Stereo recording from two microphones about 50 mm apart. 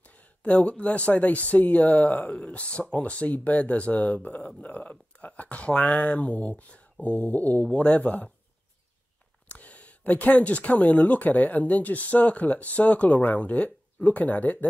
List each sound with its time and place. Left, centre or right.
0.0 s speech: left
9.5 s speech: left